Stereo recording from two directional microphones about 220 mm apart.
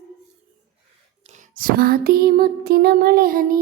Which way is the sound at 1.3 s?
35° right (ahead or behind).